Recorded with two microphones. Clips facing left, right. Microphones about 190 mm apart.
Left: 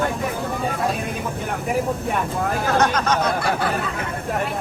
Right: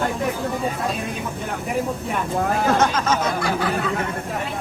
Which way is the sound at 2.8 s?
Centre (ahead or behind).